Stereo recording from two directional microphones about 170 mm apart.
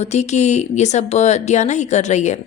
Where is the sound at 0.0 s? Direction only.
40° left (ahead or behind).